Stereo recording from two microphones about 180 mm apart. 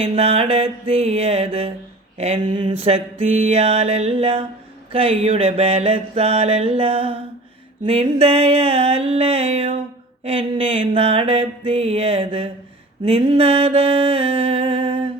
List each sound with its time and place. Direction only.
0.0 s mantra: 35° right (ahead or behind)